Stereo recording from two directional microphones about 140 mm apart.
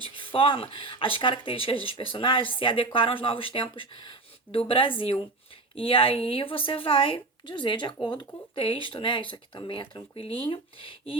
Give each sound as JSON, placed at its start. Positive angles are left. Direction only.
{"t": 0.0, "sound": "speech", "side_deg": 40}